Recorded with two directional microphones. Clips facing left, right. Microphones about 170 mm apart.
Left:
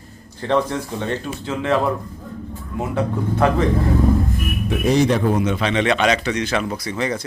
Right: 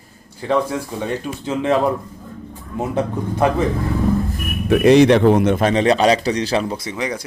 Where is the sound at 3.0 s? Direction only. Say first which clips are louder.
Even; 20° right (ahead or behind).